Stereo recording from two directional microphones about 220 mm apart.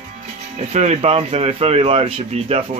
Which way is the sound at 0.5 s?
30° right (ahead or behind).